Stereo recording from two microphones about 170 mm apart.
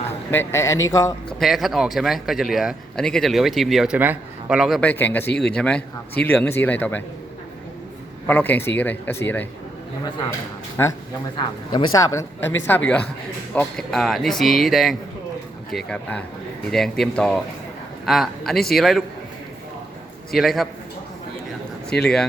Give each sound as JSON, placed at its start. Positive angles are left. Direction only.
{"t": 0.3, "sound": "a man's voice", "side_deg": 15}
{"t": 1.3, "sound": "speech", "side_deg": 0}
{"t": 4.8, "sound": "a man's voice", "side_deg": 10}
{"t": 8.3, "sound": "a man's voice", "side_deg": 10}
{"t": 10.8, "sound": "a man's voice", "side_deg": 15}
{"t": 11.3, "sound": "a man's voice", "side_deg": 25}
{"t": 20.3, "sound": "speech", "side_deg": 0}
{"t": 22.0, "sound": "speech", "side_deg": 5}